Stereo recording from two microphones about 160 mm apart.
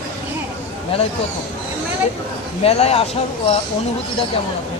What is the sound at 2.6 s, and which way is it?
Speech, 40° left (ahead or behind).